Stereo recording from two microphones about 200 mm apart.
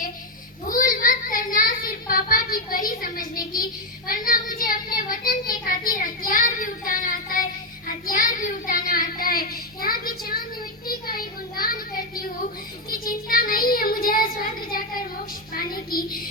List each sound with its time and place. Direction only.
0.7 s child singing: 45° left (ahead or behind)
15.5 s music: 45° left (ahead or behind)